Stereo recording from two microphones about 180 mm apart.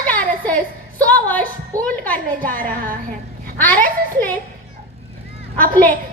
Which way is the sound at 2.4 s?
50° right (ahead or behind).